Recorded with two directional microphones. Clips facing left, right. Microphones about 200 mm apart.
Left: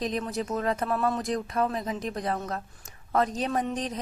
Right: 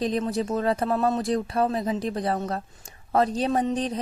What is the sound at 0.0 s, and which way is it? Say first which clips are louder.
Speech: right 5 dB; 30° right (ahead or behind).